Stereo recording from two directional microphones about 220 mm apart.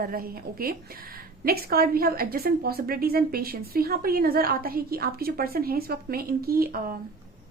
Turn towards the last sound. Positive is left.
turn(degrees=-40)  # may be behind; listen again after turning